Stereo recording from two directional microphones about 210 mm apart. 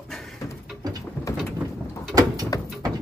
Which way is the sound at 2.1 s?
20° right (ahead or behind).